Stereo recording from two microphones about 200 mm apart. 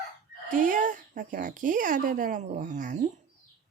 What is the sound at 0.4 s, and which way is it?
Speech, 40° right (ahead or behind).